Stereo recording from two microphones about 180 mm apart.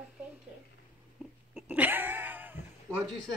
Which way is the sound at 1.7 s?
10° right (ahead or behind).